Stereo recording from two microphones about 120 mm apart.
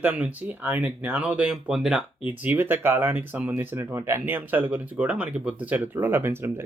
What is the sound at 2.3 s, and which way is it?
Speech, 15° right (ahead or behind).